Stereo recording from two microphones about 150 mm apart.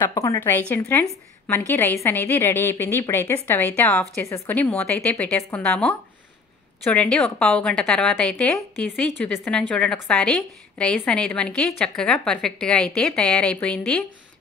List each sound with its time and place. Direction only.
0.0 s a woman's voice: 25° left (ahead or behind); by 14.0 s 5° left (ahead or behind)